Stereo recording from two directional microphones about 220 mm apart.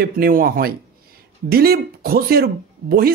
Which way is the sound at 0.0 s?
40° right (ahead or behind).